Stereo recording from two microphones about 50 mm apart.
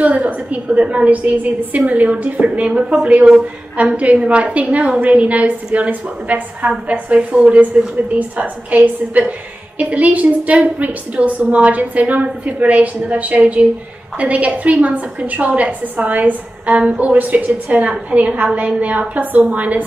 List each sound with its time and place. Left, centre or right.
0.0 s a woman's voice: right
8.6 s a woman's voice: right